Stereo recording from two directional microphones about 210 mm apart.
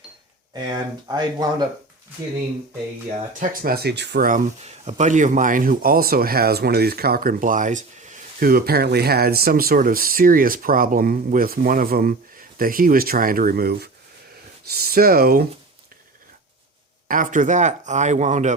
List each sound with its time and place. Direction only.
0.5 s speech: 20° right (ahead or behind)
3.4 s speech: 45° right (ahead or behind)
17.1 s speech: 40° right (ahead or behind)